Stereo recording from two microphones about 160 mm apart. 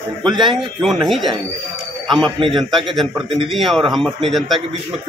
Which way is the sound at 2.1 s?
Centre (ahead or behind).